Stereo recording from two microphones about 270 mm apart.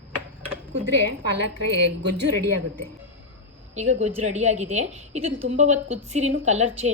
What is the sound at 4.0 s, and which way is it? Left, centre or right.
A woman's voice, right.